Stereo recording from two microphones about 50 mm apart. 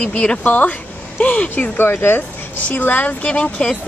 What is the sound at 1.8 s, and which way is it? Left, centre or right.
Speech, left.